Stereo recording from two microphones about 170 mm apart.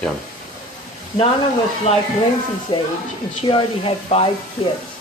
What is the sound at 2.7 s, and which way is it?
Speech, 30° left (ahead or behind).